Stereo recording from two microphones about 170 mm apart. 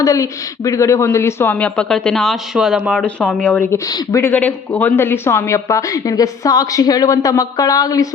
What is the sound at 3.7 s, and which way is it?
Speech, 20° left (ahead or behind).